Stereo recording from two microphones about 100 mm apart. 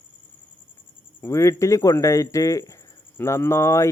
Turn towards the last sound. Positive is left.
turn(degrees=30)  # may be behind; listen again after turning